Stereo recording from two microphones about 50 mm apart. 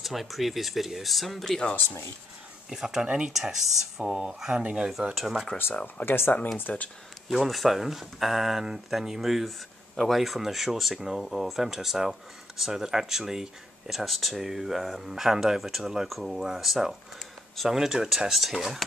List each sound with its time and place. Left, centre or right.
0.0 s speech: centre
2.7 s speech: centre
3.3 s speech: centre
4.0 s speech: centre
6.0 s speech: left
6.7 s speech: left
7.2 s speech: centre